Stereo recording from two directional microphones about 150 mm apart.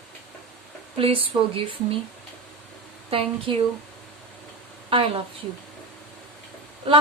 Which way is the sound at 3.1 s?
40° right (ahead or behind).